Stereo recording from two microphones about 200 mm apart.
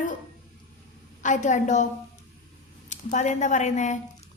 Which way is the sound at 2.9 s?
35° left (ahead or behind).